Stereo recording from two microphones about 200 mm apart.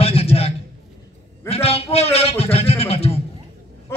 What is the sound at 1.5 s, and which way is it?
A man's voice, 30° left (ahead or behind).